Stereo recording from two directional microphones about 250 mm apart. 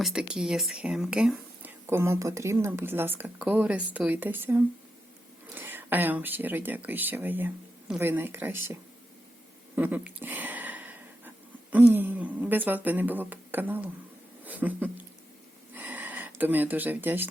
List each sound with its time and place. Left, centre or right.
0.0 s speech: centre
11.9 s speech: centre
14.4 s a sound: centre